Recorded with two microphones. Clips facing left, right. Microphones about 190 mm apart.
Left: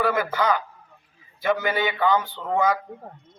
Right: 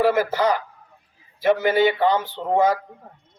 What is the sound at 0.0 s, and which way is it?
Speech, 35° right (ahead or behind).